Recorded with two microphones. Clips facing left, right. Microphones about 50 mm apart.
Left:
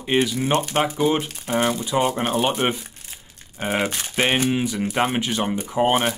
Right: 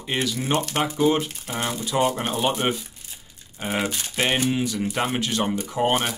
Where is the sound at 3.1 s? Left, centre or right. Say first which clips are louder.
Left 3 dB; left.